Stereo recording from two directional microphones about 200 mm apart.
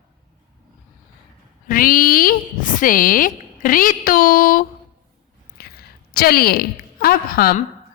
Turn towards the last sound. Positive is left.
turn(degrees=50)  # may be behind; listen again after turning